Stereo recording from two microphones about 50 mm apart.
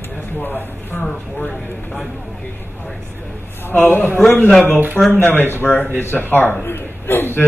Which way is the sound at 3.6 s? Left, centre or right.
Left.